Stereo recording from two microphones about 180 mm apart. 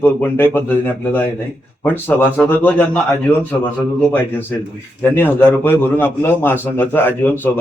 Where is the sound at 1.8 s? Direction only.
10° left (ahead or behind).